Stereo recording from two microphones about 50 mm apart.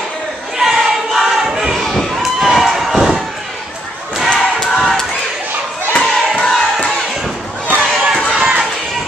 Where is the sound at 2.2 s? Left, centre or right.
Centre.